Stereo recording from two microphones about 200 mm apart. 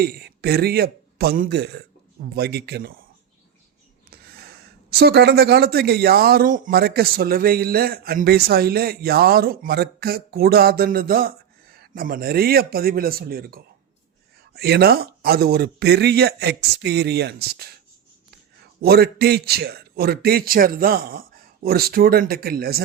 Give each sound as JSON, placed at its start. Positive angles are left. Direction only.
{"t": 0.0, "sound": "speech", "side_deg": -50}
{"t": 4.1, "sound": "speech", "side_deg": -55}
{"t": 18.8, "sound": "speech", "side_deg": -50}